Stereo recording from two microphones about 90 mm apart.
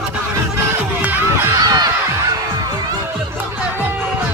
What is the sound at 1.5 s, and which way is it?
Heart sounds, 45° right (ahead or behind).